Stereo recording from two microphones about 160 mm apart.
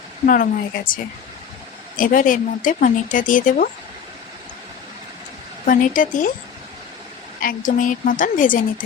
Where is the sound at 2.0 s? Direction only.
60° left (ahead or behind).